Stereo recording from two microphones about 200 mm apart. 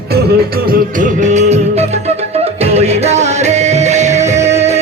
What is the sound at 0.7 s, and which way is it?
Music, 40° right (ahead or behind).